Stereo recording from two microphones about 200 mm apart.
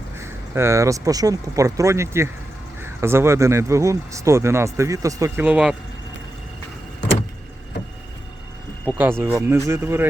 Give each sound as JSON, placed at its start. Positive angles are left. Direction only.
{"t": 0.2, "sound": "speech", "side_deg": -15}
{"t": 9.0, "sound": "speech", "side_deg": -10}